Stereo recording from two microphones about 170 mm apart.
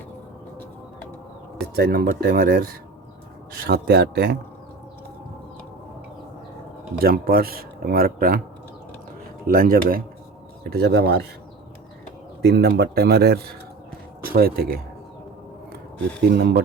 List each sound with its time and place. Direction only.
1.7 s speech: 65° right (ahead or behind)
7.0 s speech: 60° right (ahead or behind)
9.5 s speech: 55° right (ahead or behind)
10.7 s speech: 75° right (ahead or behind)
12.4 s speech: 70° right (ahead or behind)
16.3 s speech: 70° right (ahead or behind)